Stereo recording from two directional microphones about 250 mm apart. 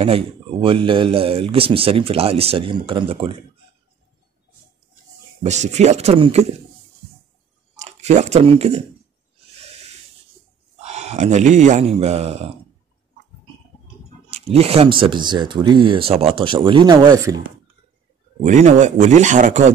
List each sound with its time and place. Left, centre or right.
0.0 s speech: right
5.4 s speech: right
7.8 s speech: right
10.8 s speech: right
14.3 s speech: right
18.4 s speech: right